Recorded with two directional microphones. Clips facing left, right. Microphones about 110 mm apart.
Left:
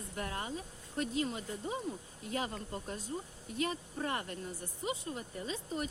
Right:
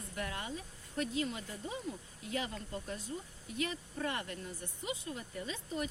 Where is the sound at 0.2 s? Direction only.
35° left (ahead or behind).